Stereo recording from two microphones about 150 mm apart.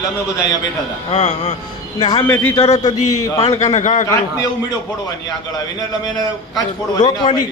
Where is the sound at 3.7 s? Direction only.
55° left (ahead or behind).